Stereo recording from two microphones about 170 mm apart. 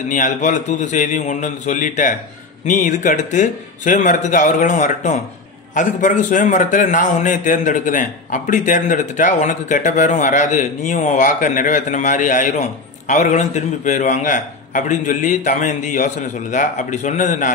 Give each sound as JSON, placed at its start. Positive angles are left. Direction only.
{"t": 0.1, "sound": "a man's voice", "side_deg": 45}